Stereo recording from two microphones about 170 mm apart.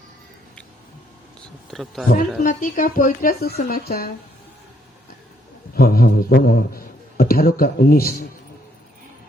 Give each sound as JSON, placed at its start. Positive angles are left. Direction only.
{"t": 1.7, "sound": "speech", "side_deg": 0}
{"t": 2.4, "sound": "speech", "side_deg": 50}
{"t": 5.7, "sound": "a man's voice", "side_deg": 60}